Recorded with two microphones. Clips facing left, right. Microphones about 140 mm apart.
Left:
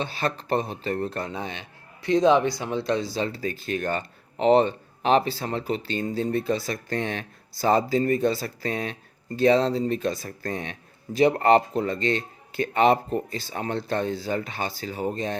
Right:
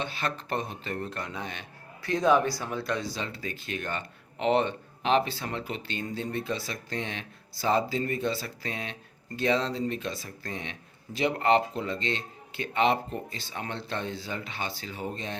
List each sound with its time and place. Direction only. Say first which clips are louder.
0.0 s speech: left 5 dB; 35° left (ahead or behind)